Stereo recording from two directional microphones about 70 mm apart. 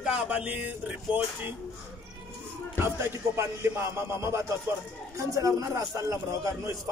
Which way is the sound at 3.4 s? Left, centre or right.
Right.